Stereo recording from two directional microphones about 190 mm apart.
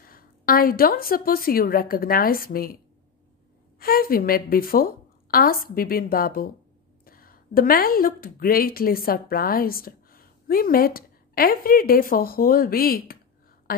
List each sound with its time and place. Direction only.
0.0 s a woman's voice: 50° left (ahead or behind)
3.8 s a woman's voice: 50° left (ahead or behind)